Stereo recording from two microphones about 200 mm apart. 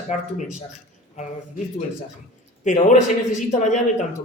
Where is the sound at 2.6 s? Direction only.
40° left (ahead or behind).